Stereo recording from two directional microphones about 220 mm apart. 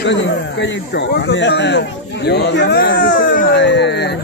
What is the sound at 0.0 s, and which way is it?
Speech, 55° left (ahead or behind).